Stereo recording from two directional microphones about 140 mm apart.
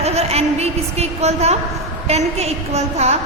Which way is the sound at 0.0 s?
50° right (ahead or behind).